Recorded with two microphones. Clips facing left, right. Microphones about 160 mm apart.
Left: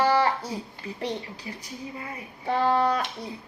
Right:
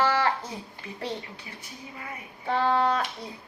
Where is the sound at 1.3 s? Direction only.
35° left (ahead or behind).